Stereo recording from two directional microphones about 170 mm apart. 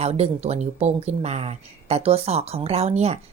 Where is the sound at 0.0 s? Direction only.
40° right (ahead or behind).